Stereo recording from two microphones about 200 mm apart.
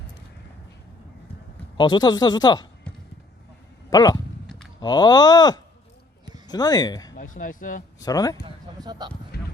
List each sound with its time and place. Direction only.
1.8 s speech: 20° left (ahead or behind)
3.8 s speech: 20° left (ahead or behind)
4.4 s a sound: centre (ahead or behind)
4.8 s speech: 20° left (ahead or behind)
7.2 s speech: 45° left (ahead or behind)
7.9 s speech: 20° left (ahead or behind)
8.4 s speech: 20° right (ahead or behind)
9.3 s a sound: 50° left (ahead or behind)